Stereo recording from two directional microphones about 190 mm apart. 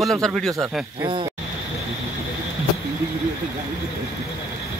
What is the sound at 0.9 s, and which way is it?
Speech, 20° right (ahead or behind).